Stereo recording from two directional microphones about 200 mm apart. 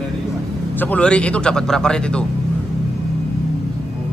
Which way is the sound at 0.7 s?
10° left (ahead or behind).